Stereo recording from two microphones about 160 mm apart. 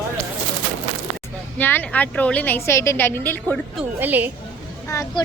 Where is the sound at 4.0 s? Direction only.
10° right (ahead or behind).